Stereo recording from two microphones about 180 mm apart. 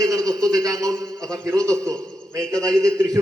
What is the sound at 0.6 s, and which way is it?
A man's voice, 20° right (ahead or behind).